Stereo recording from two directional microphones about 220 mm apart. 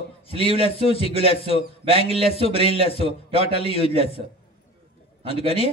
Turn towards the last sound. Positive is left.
turn(degrees=25)  # may be behind; listen again after turning